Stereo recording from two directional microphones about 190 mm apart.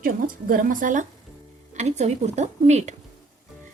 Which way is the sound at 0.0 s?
45° right (ahead or behind).